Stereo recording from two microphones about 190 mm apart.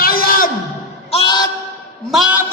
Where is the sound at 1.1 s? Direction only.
25° left (ahead or behind).